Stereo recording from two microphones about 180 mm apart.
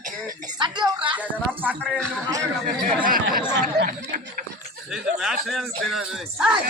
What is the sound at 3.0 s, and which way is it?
Speech, 50° right (ahead or behind).